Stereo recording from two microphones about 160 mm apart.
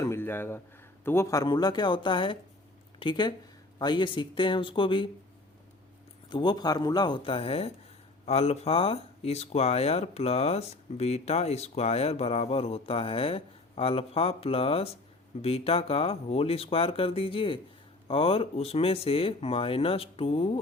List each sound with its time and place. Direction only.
0.0 s a sound: 15° left (ahead or behind)
1.0 s speech: 15° left (ahead or behind); by 5.0 s 30° left (ahead or behind)
6.3 s speech: 25° left (ahead or behind)